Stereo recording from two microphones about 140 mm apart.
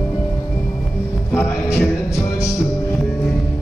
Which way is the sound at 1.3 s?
15° left (ahead or behind).